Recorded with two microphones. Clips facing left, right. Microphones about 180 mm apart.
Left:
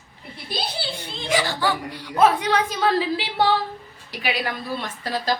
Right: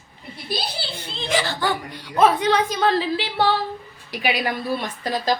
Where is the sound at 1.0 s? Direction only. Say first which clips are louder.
Even; 15° left (ahead or behind).